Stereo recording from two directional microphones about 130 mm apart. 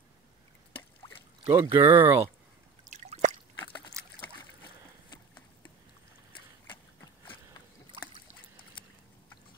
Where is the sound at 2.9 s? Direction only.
60° right (ahead or behind).